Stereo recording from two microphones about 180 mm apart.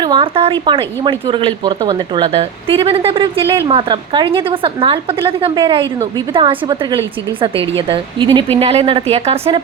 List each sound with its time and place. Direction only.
0.0 s a woman's voice: 25° right (ahead or behind)